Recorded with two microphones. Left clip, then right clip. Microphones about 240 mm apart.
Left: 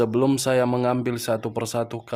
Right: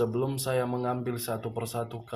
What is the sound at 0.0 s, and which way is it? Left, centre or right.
Speech, left.